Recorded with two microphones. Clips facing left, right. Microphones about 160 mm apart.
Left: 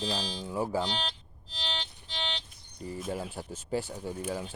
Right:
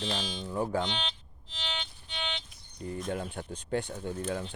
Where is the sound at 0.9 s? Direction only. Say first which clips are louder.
Left 1 dB; 35° left (ahead or behind).